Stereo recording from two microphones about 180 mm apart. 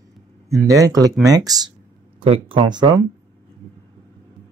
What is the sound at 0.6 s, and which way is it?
Speech, 20° right (ahead or behind).